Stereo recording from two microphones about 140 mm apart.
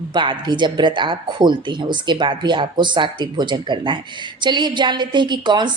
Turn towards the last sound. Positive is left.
turn(degrees=-30)  # may be behind; listen again after turning